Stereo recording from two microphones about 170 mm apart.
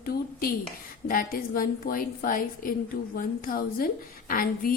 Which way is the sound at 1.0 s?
55° left (ahead or behind).